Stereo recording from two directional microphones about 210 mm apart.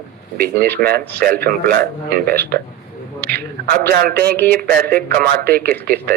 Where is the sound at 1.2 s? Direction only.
45° right (ahead or behind).